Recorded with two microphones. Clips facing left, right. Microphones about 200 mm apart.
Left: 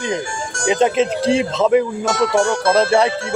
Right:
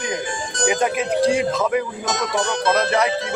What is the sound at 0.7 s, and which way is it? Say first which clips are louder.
Speech: left 6 dB; 25° left (ahead or behind).